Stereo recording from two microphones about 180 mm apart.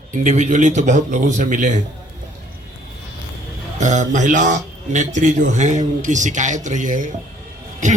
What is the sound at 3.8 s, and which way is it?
A man's voice, 45° right (ahead or behind).